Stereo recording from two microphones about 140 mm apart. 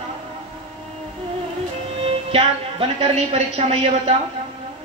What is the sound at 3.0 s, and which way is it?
A woman's voice, 50° right (ahead or behind).